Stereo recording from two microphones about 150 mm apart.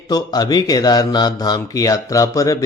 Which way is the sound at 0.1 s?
25° left (ahead or behind).